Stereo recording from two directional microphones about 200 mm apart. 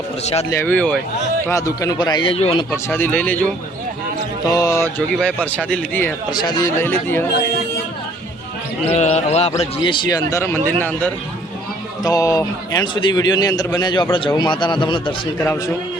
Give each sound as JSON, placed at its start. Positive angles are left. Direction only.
{"t": 0.5, "sound": "a man's voice", "side_deg": 10}
{"t": 2.7, "sound": "a man's voice", "side_deg": 10}
{"t": 4.4, "sound": "a man's voice", "side_deg": 15}
{"t": 8.9, "sound": "a man's voice", "side_deg": 35}